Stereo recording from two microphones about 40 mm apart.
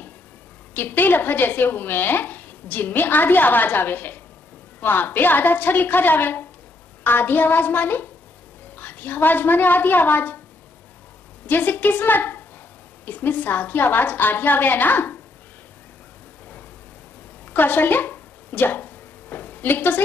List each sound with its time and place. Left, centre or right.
0.7 s a woman's voice: left
11.4 s speech: left
17.5 s a sound: left